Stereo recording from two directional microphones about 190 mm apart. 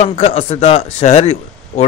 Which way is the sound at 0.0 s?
35° left (ahead or behind).